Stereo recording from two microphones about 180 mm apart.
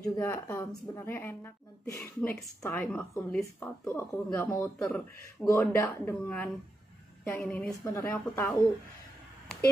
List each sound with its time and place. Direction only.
0.0 s speech: 15° left (ahead or behind)
5.5 s speech: 15° left (ahead or behind)